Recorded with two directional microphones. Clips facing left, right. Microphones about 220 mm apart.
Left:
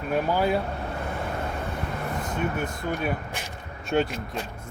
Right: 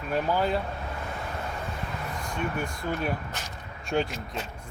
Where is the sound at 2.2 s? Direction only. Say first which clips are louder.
Left 2 dB; 20° left (ahead or behind).